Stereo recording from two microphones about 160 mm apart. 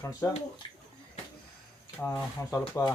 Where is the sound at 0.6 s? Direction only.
30° left (ahead or behind).